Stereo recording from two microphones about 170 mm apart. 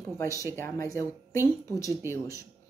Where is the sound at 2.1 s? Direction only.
20° left (ahead or behind).